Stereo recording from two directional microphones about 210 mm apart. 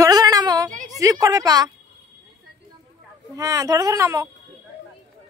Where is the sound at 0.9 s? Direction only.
15° right (ahead or behind).